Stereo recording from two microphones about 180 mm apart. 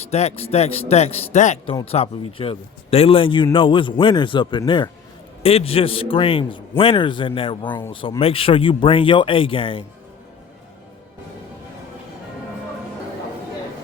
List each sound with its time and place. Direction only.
0.0 s a man's voice: 35° left (ahead or behind)